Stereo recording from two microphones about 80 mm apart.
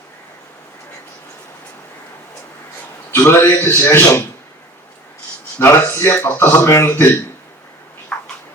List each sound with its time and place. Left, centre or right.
3.1 s a man's voice: left
5.5 s speech: left
8.1 s a sound: centre